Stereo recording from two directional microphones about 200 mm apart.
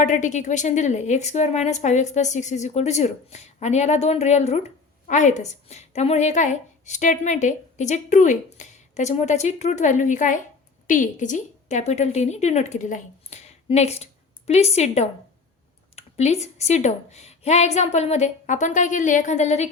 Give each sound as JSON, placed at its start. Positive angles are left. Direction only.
{"t": 0.0, "sound": "a woman's voice", "side_deg": 40}